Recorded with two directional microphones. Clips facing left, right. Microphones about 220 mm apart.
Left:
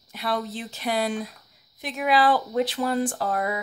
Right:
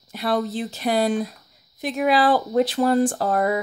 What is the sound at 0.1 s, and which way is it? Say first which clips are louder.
Speech: right 5 dB; 40° right (ahead or behind).